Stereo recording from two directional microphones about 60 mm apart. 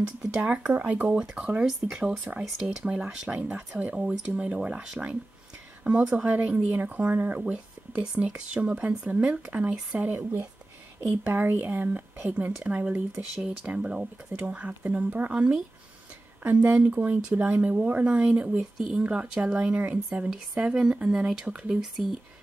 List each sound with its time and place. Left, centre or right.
0.3 s speech: centre
3.5 s speech: right
6.1 s speech: right
11.0 s speech: right
12.5 s speech: right
14.4 s speech: right
16.4 s speech: right; by 22.0 s centre